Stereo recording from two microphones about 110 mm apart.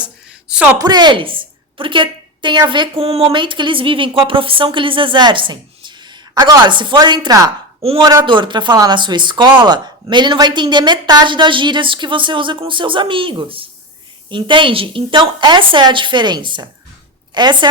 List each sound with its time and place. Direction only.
0.0 s a sound: 10° right (ahead or behind)
0.8 s a woman's voice: 40° right (ahead or behind)
3.0 s a woman's voice: 65° right (ahead or behind); by 17.7 s 45° right (ahead or behind)